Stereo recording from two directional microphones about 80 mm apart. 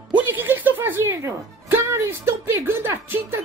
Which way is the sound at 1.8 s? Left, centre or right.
Right.